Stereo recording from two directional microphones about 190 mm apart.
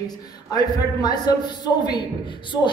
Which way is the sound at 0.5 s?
20° left (ahead or behind).